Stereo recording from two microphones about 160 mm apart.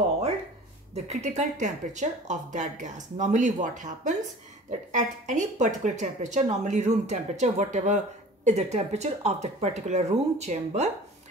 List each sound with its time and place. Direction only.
0.9 s a woman's voice: 45° right (ahead or behind)